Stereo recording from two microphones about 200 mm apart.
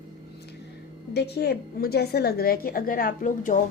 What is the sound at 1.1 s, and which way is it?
A woman's voice, 55° left (ahead or behind).